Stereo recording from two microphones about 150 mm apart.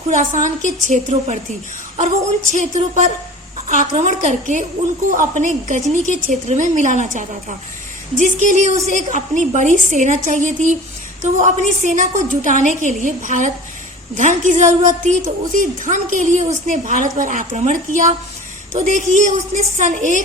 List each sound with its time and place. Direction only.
0.1 s a woman's voice: 60° right (ahead or behind)